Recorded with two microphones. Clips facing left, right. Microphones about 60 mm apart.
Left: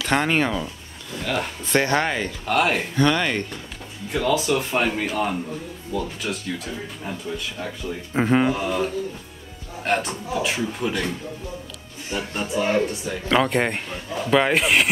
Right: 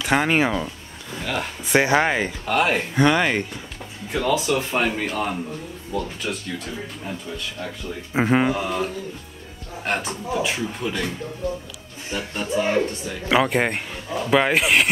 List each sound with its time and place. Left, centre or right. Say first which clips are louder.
0.0 s speech: right 1 dB; centre
2.4 s speech: left 1 dB; centre
3.0 s speech: right 2 dB; centre
4.1 s speech: even; centre
8.1 s speech: even; centre
12.5 s speech: even; centre
12.8 s speech: left 1 dB; centre